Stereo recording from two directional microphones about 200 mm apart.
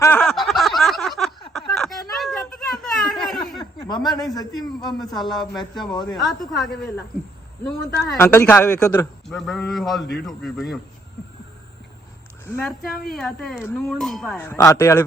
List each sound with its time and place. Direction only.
0.0 s a sound: 5° left (ahead or behind)
3.8 s a sound: 20° left (ahead or behind)
4.4 s a man's voice: 20° left (ahead or behind)
5.1 s a man's voice: centre (ahead or behind)
5.7 s a man's voice: 20° left (ahead or behind)
6.1 s a man's voice: centre (ahead or behind)
8.2 s a man's voice: 10° left (ahead or behind)
9.2 s a man's voice: centre (ahead or behind)
12.5 s a man's voice: 5° left (ahead or behind)